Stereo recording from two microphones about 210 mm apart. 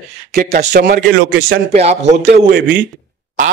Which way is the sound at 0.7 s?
50° right (ahead or behind).